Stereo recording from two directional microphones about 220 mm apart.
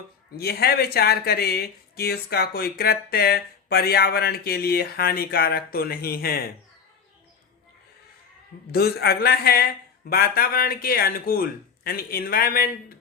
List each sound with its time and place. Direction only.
0.3 s speech: 45° left (ahead or behind)
8.7 s speech: 45° left (ahead or behind)